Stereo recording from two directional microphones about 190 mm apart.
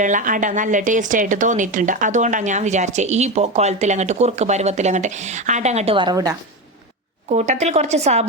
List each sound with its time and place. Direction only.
0.0 s a woman's voice: 40° right (ahead or behind); by 6.3 s 20° right (ahead or behind)
7.3 s a woman's voice: 35° right (ahead or behind)